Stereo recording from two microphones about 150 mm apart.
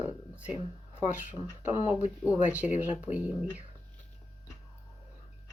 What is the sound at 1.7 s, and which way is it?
Speech, 40° left (ahead or behind).